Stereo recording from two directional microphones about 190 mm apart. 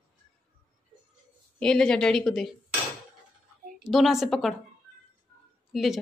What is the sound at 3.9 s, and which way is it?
Speech, centre (ahead or behind).